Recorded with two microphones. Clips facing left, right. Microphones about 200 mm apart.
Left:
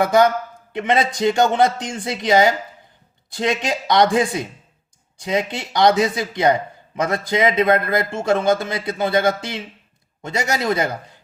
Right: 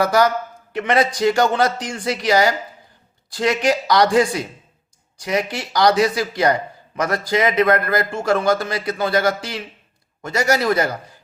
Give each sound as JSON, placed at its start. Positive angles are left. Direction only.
{"t": 0.0, "sound": "speech", "side_deg": 25}